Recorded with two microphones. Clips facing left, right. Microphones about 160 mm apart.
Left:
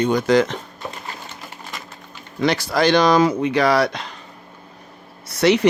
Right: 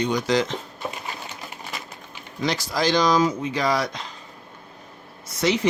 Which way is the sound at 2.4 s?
65° left (ahead or behind).